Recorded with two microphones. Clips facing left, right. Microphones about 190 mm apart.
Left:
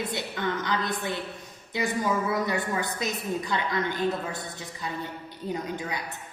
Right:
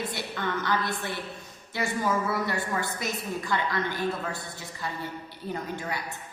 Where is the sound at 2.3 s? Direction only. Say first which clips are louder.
Left 2 dB; 20° left (ahead or behind).